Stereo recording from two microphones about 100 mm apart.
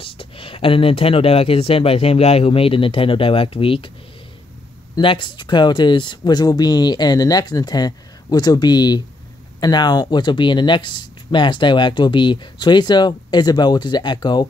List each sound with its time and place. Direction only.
0.0 s speech: 65° left (ahead or behind)
5.0 s speech: 55° left (ahead or behind)